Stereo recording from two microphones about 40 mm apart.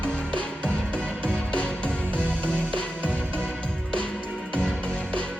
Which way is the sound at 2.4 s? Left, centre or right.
Left.